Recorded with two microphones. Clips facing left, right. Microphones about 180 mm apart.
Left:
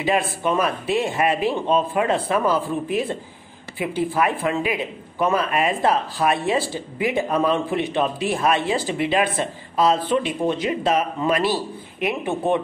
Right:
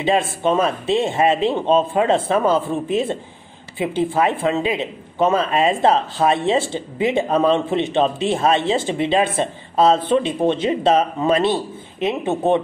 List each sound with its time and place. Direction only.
0.0 s speech: 25° right (ahead or behind)